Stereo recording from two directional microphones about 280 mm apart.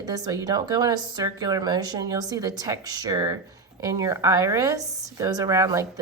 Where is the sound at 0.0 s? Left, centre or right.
Centre.